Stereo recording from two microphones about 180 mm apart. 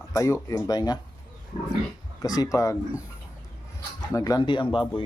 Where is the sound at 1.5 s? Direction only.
35° left (ahead or behind).